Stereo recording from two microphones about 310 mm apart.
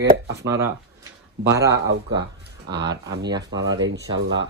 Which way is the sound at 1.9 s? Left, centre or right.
Right.